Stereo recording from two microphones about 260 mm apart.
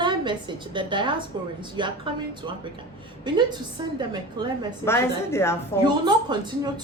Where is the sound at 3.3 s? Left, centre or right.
Centre.